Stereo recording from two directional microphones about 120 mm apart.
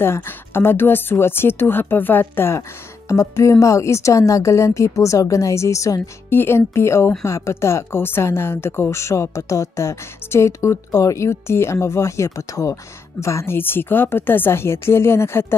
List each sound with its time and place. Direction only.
0.0 s speech: 20° left (ahead or behind)